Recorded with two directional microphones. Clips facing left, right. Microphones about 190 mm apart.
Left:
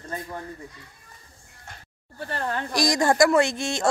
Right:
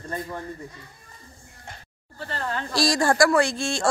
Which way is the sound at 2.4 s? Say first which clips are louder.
Even; 15° left (ahead or behind).